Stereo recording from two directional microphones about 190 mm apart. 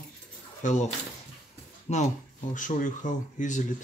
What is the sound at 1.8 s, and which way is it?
Speech, 40° left (ahead or behind).